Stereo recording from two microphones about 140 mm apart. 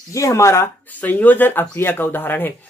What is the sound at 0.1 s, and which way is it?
Speech, 20° left (ahead or behind).